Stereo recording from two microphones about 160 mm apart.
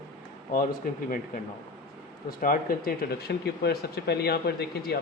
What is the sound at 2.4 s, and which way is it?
Speech, 65° left (ahead or behind).